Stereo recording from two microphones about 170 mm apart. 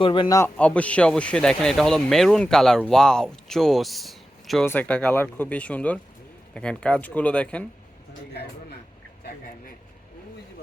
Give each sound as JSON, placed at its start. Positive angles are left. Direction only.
{"t": 0.0, "sound": "a man's voice", "side_deg": 30}
{"t": 0.3, "sound": "a man's voice", "side_deg": 10}
{"t": 4.6, "sound": "speech", "side_deg": 10}